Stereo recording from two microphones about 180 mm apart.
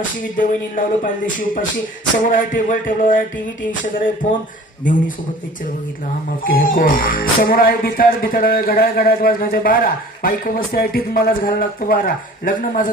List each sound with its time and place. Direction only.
0.3 s music: 50° left (ahead or behind)
4.2 s a man's voice: 40° left (ahead or behind)
6.4 s music: 50° left (ahead or behind)